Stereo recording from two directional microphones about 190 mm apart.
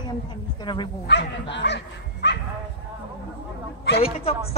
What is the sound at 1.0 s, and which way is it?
Speech, 65° left (ahead or behind).